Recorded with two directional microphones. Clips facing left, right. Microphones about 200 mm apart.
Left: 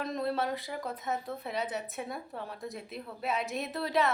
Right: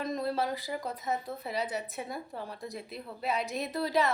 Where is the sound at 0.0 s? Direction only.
Centre (ahead or behind).